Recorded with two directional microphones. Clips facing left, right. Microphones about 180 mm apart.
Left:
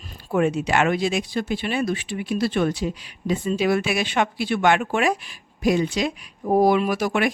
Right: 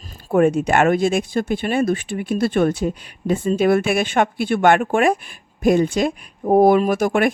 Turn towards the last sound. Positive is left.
turn(degrees=-50)  # may be behind; listen again after turning